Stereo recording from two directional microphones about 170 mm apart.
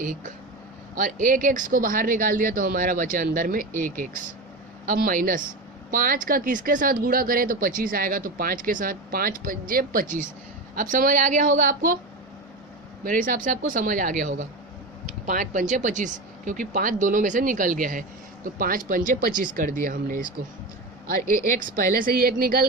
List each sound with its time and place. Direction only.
0.0 s speech: 50° right (ahead or behind)
13.1 s speech: 55° right (ahead or behind)
21.6 s speech: 55° right (ahead or behind)